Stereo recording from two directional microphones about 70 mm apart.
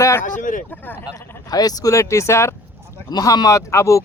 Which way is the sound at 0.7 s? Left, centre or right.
Left.